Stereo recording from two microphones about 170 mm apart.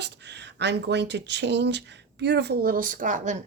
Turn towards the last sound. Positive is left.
turn(degrees=-45)  # may be behind; listen again after turning